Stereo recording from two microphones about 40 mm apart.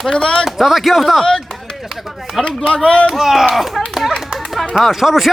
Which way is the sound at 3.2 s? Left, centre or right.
Centre.